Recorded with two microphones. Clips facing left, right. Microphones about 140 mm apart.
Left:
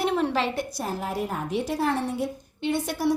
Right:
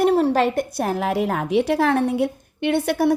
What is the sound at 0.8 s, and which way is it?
A woman's voice, 70° right (ahead or behind).